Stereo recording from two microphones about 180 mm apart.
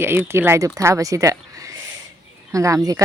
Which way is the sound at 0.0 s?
10° right (ahead or behind).